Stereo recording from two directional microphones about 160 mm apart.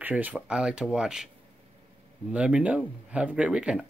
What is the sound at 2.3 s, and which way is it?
Speech, 5° right (ahead or behind).